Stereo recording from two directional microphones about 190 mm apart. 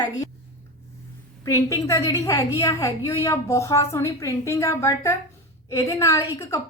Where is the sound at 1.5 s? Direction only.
15° left (ahead or behind).